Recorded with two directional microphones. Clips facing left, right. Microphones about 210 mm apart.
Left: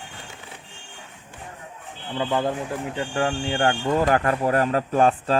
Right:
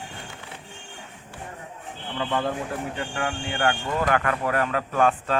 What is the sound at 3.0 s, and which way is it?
Speech, 30° left (ahead or behind).